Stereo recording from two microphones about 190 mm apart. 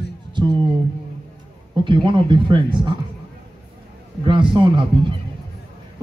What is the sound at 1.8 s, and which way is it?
Speech, 25° right (ahead or behind).